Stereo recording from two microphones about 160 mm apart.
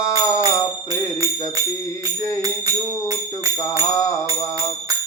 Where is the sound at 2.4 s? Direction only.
20° right (ahead or behind).